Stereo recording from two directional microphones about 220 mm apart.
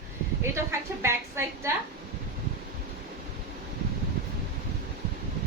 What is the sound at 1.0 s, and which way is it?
Speech, 10° right (ahead or behind).